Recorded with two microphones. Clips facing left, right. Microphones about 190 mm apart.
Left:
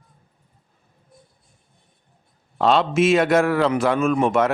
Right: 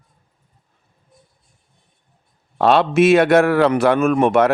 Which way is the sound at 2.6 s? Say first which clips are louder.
Right 4 dB; 65° right (ahead or behind).